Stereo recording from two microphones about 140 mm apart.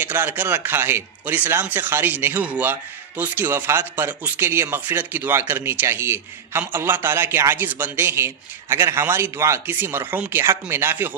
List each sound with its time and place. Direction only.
0.0 s speech: 15° right (ahead or behind)